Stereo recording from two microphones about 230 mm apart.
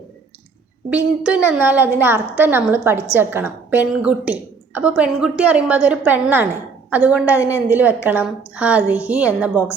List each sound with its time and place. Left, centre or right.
0.9 s a woman's voice: centre